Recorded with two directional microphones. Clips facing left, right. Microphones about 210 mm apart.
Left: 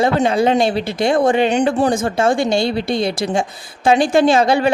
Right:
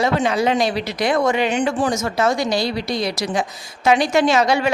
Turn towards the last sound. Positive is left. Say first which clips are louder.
# left 3 dB
turn(degrees=30)  # may be behind; listen again after turning